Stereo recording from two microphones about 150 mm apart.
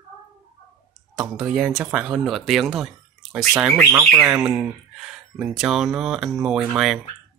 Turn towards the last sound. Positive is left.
turn(degrees=0)  # may be behind; listen again after turning